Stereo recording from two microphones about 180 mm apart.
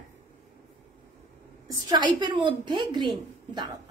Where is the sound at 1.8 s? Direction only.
25° right (ahead or behind).